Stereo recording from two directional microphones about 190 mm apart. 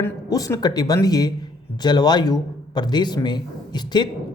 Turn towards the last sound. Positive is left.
turn(degrees=20)  # may be behind; listen again after turning